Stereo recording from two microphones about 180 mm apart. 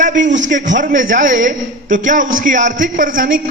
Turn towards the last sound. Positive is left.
turn(degrees=-50)  # may be behind; listen again after turning